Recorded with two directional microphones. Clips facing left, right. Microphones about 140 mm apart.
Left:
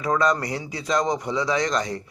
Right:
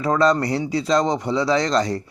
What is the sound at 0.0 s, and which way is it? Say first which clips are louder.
A man's voice: right 4 dB; 30° right (ahead or behind).